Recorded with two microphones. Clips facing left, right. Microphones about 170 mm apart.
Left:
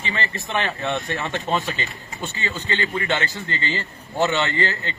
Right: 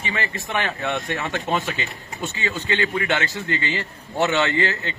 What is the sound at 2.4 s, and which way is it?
A man's voice, 15° right (ahead or behind).